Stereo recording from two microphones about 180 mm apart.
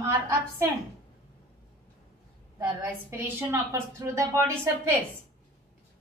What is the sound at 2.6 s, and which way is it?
A woman's voice, 10° right (ahead or behind).